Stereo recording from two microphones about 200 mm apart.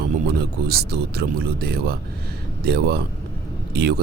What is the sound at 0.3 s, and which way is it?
Speech, 50° right (ahead or behind).